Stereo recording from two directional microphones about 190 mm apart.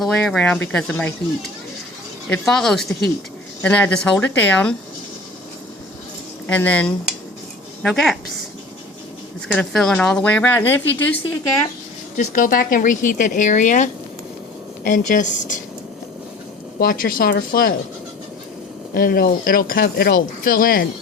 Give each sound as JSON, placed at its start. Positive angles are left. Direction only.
{"t": 0.0, "sound": "speech", "side_deg": 5}
{"t": 6.5, "sound": "a woman's voice", "side_deg": 5}
{"t": 9.5, "sound": "speech", "side_deg": 5}
{"t": 12.1, "sound": "speech", "side_deg": 40}
{"t": 16.8, "sound": "speech", "side_deg": 50}
{"t": 18.9, "sound": "speech", "side_deg": 55}